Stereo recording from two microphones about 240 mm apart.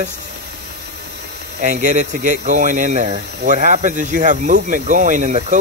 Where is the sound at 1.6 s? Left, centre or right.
Right.